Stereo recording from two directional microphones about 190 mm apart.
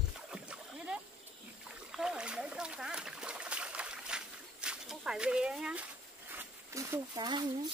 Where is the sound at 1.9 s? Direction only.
5° right (ahead or behind).